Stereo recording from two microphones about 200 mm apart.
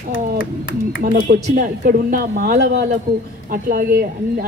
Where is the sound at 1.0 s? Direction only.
45° right (ahead or behind).